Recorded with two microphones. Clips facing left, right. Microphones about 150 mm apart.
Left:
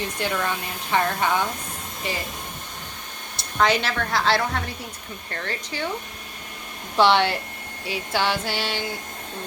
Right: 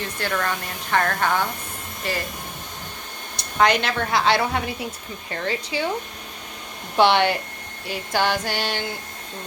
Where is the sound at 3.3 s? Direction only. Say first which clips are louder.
Right 2 dB; centre (ahead or behind).